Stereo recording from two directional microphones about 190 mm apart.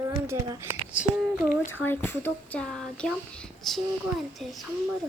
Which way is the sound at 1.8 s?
10° left (ahead or behind).